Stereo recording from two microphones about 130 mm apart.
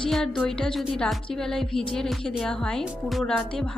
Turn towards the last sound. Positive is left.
turn(degrees=5)  # may be behind; listen again after turning